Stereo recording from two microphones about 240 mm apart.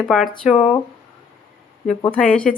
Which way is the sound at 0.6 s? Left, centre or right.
Left.